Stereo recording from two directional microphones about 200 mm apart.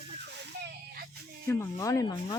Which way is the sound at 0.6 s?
50° right (ahead or behind).